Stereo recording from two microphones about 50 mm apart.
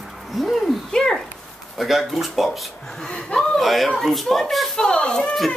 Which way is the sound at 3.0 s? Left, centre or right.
Centre.